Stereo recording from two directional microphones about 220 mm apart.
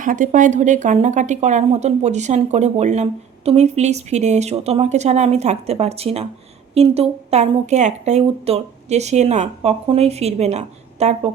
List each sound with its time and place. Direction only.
0.0 s a woman's voice: 35° right (ahead or behind)